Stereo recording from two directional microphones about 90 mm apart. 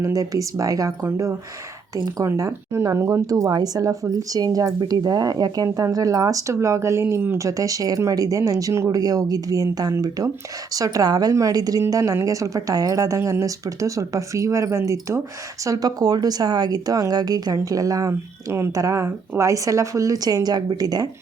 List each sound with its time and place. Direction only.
0.0 s speech: 40° right (ahead or behind)
2.0 s a woman's voice: 40° right (ahead or behind)
15.6 s a woman's voice: 40° right (ahead or behind)